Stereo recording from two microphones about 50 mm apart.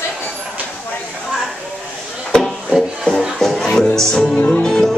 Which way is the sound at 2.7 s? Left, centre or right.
Right.